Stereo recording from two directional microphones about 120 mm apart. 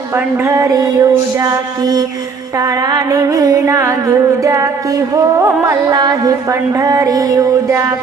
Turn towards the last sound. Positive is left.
turn(degrees=-30)  # may be behind; listen again after turning